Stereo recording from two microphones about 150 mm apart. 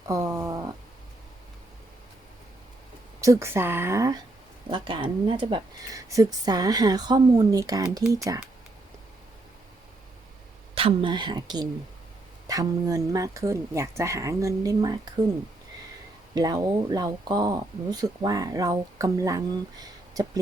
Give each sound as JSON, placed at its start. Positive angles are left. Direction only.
{"t": 0.1, "sound": "a sound", "side_deg": -20}
{"t": 3.2, "sound": "speech", "side_deg": -20}
{"t": 4.7, "sound": "speech", "side_deg": -35}
{"t": 10.8, "sound": "speech", "side_deg": -35}
{"t": 16.3, "sound": "speech", "side_deg": -25}